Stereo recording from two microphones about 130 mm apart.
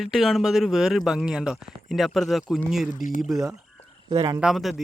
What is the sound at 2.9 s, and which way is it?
Speech, 85° left.